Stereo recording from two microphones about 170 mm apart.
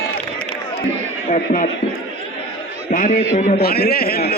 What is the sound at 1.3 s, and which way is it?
Speech, 50° left (ahead or behind).